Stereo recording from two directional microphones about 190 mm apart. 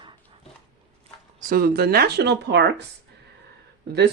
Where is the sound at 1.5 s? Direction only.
55° right (ahead or behind).